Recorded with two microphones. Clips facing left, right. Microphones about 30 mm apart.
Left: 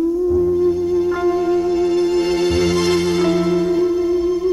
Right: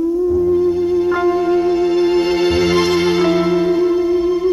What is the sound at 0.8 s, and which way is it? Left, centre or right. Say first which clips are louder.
Music: right 2 dB; right.